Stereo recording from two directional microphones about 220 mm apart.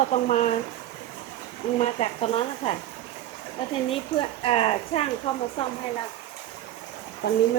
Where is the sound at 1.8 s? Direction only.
25° left (ahead or behind).